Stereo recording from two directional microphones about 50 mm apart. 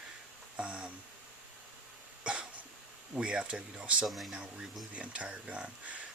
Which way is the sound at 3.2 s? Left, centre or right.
Centre.